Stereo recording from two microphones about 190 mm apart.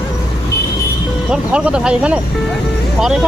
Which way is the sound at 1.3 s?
5° right (ahead or behind).